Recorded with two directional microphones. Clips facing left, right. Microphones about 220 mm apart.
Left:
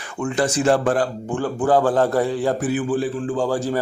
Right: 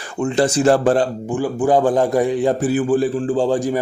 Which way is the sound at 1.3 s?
10° right (ahead or behind).